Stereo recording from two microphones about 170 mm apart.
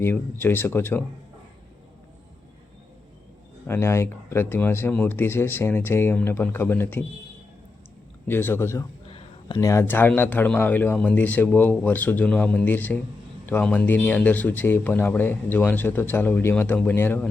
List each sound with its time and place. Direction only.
0.0 s speech: 15° left (ahead or behind)
3.7 s speech: 15° left (ahead or behind)
8.3 s speech: 15° left (ahead or behind)
9.0 s a sound: 30° left (ahead or behind)
9.6 s speech: 15° left (ahead or behind)